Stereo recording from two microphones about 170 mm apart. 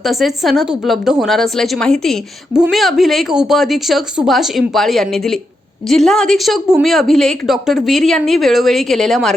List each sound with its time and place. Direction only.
0.0 s a woman's voice: centre (ahead or behind)